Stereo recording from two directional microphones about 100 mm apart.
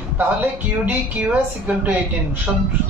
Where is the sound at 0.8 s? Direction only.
15° right (ahead or behind).